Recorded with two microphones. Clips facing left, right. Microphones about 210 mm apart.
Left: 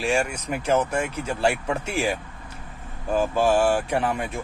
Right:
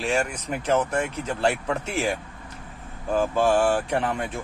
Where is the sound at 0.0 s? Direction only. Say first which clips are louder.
Left 1 dB; 10° left (ahead or behind).